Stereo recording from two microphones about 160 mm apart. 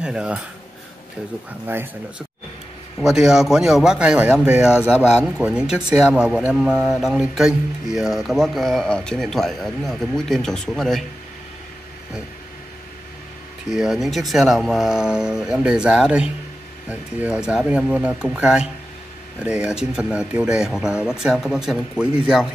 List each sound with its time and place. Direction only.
0.0 s speech: 5° right (ahead or behind)
1.7 s speech: 10° right (ahead or behind)
13.7 s speech: 5° right (ahead or behind)